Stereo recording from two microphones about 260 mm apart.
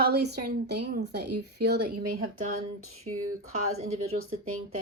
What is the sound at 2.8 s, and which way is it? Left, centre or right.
Speech, right.